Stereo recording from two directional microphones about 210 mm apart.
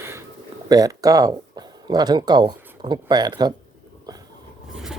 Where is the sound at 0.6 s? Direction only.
15° right (ahead or behind).